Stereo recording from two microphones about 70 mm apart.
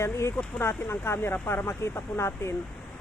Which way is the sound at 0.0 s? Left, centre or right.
Left.